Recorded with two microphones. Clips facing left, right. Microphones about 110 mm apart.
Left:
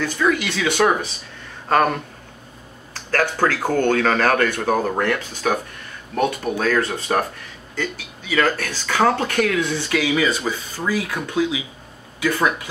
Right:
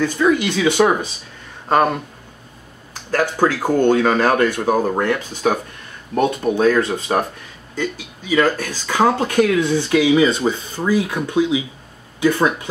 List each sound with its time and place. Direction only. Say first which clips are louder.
0.0 s speech: right 4 dB; 15° right (ahead or behind)